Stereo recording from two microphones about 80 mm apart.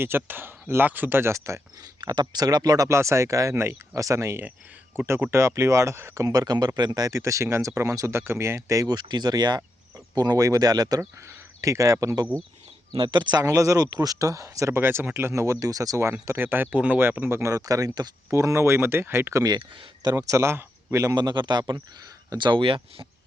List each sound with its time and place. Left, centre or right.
0.0 s speech: right
2.0 s speech: right
2.9 s speech: right
6.2 s speech: right
7.1 s speech: right
12.9 s speech: right
13.4 s speech: right
16.2 s speech: right
17.5 s speech: right
18.3 s speech: right
19.3 s speech: right
21.2 s speech: right
22.4 s speech: right